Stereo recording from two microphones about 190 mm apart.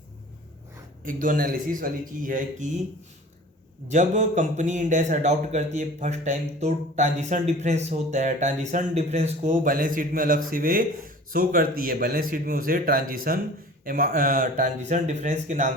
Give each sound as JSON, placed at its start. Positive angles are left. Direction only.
{"t": 1.0, "sound": "speech", "side_deg": -45}
{"t": 3.8, "sound": "a man's voice", "side_deg": -40}